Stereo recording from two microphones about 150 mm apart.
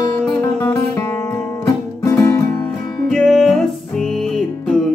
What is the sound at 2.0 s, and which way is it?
Music, 15° left (ahead or behind).